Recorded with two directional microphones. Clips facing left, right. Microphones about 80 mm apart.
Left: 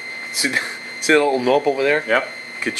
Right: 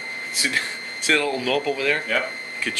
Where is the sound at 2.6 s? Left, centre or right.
Left.